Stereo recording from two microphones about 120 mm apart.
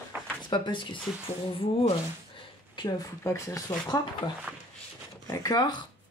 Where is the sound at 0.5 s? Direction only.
40° left (ahead or behind).